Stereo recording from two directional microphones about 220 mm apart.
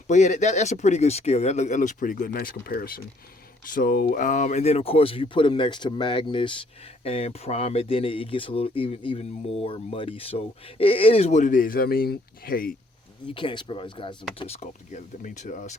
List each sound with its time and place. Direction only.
0.1 s speech: 35° left (ahead or behind)
13.2 s speech: 20° left (ahead or behind)